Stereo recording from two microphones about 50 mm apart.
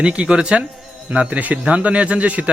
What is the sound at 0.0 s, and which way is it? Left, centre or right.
A man's voice, right.